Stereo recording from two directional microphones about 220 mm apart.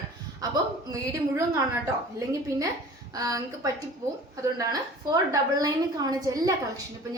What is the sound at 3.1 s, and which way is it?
A woman's voice, 15° right (ahead or behind).